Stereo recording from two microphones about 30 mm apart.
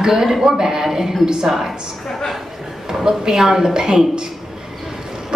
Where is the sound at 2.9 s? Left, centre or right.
Centre.